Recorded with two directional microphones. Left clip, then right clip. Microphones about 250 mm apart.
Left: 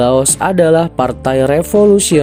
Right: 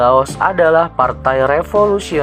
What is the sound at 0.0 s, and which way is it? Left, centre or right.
Speech, left.